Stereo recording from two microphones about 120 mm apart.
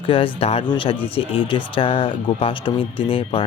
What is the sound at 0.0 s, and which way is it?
Speech, 50° left (ahead or behind).